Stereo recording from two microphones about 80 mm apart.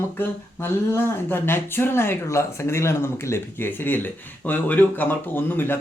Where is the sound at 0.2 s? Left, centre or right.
Left.